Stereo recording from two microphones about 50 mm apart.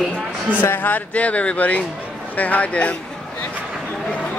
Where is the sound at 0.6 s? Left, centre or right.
Left.